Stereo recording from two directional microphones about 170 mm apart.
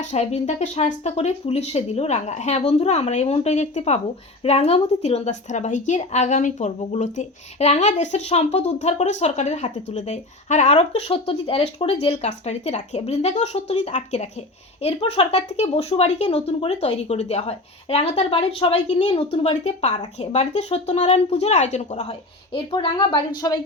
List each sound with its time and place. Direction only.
0.0 s a woman's voice: 40° left (ahead or behind); by 23.6 s 25° left (ahead or behind)